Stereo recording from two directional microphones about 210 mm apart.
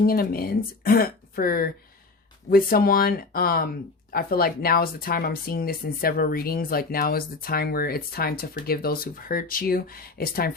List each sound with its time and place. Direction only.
0.0 s speech: 45° left (ahead or behind)